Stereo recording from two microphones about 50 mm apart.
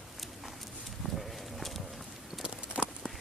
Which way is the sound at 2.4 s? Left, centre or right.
Centre.